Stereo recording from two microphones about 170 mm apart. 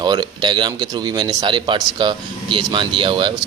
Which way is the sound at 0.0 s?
25° right (ahead or behind).